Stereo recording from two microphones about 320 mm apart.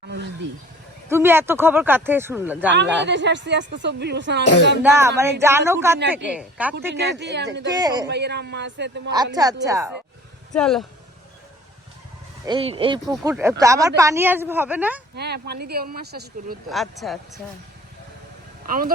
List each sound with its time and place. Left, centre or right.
1.1 s speech: centre
2.7 s a woman's voice: right
4.8 s speech: centre
6.9 s a woman's voice: right
7.7 s speech: centre
8.0 s a woman's voice: right
9.1 s speech: centre
10.5 s speech: centre
12.5 s speech: centre
15.1 s speech: right
16.6 s speech: centre
18.6 s speech: right